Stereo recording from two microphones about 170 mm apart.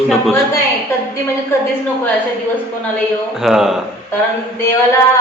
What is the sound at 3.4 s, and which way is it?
Speech, centre (ahead or behind).